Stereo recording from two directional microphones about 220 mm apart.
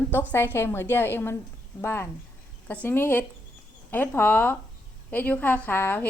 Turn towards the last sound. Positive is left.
turn(degrees=10)  # may be behind; listen again after turning